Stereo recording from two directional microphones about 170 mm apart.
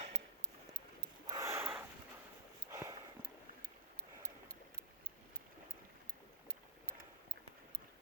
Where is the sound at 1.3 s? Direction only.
20° right (ahead or behind).